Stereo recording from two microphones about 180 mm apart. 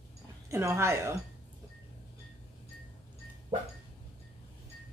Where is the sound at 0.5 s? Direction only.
15° right (ahead or behind).